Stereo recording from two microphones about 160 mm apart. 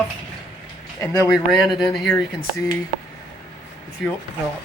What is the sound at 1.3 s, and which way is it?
Speech, centre (ahead or behind).